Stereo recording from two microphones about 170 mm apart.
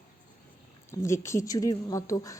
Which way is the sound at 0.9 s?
15° left (ahead or behind).